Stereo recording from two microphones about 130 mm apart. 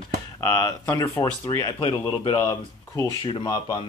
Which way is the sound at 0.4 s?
20° left (ahead or behind).